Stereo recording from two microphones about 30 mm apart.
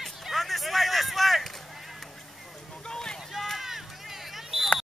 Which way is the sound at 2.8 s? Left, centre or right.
Left.